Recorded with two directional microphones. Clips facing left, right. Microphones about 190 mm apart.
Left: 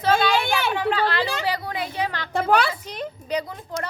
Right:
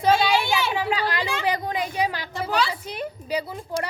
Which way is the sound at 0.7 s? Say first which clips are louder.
Left 2 dB; 10° right (ahead or behind).